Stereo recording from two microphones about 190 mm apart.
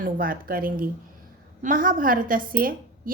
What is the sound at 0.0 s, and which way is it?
A woman's voice, 50° right (ahead or behind).